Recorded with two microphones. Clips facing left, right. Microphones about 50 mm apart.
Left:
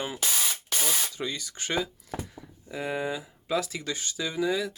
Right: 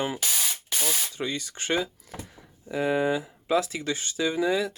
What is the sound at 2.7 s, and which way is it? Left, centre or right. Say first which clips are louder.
Speech: right 6 dB; right.